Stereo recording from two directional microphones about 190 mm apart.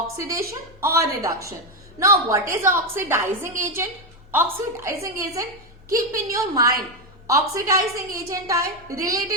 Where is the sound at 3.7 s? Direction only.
10° right (ahead or behind).